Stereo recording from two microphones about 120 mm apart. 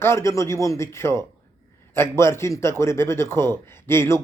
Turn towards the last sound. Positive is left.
turn(degrees=20)  # may be behind; listen again after turning